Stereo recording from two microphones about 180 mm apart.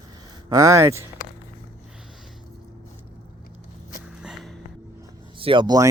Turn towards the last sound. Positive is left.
turn(degrees=-25)  # may be behind; listen again after turning